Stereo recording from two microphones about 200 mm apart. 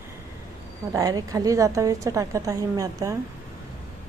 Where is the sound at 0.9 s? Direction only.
15° right (ahead or behind).